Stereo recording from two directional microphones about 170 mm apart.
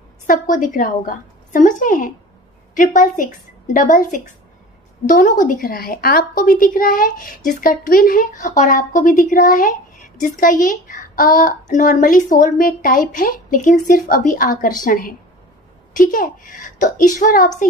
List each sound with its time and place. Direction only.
0.3 s a woman's voice: 50° left (ahead or behind)